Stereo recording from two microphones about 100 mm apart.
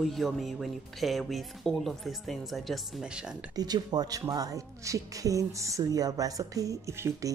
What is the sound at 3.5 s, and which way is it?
Speech, 40° right (ahead or behind).